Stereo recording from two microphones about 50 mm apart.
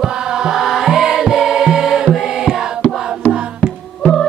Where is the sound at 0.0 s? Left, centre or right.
Centre.